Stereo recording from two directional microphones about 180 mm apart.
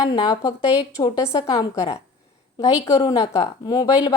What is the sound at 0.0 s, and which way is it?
A woman's voice, 25° left (ahead or behind).